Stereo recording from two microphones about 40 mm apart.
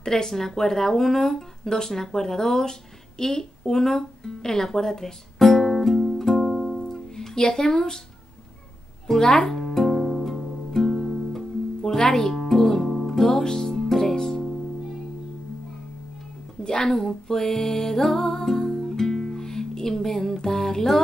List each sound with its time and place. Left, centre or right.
0.0 s speech: centre
6.9 s music: centre
7.4 s speech: centre
9.0 s music: centre
16.6 s speech: centre
16.9 s music: centre